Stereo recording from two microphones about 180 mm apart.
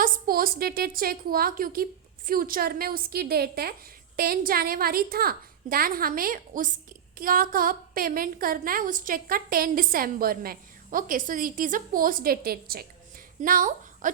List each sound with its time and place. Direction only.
0.0 s a woman's voice: 55° right (ahead or behind)